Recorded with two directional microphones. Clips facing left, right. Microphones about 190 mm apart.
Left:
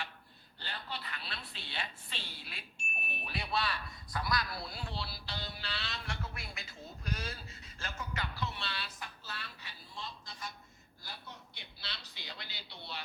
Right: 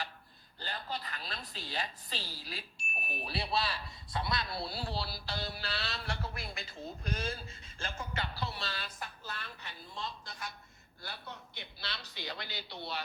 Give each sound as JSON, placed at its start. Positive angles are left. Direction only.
{"t": 0.6, "sound": "a woman's voice", "side_deg": -40}
{"t": 11.0, "sound": "speech", "side_deg": -65}